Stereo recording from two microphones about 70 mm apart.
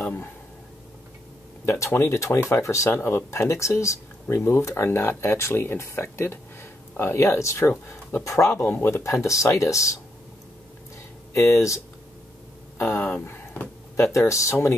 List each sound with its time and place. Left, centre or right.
0.0 s a sound: left
1.7 s speech: left
8.5 s speech: left
11.3 s speech: left
12.9 s speech: left